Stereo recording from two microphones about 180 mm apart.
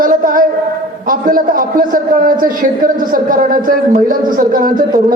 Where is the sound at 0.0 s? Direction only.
50° right (ahead or behind).